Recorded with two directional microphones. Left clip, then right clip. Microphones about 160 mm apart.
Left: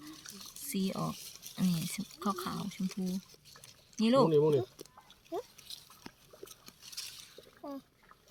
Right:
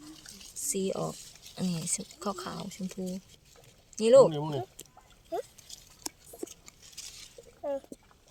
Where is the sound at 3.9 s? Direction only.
30° right (ahead or behind).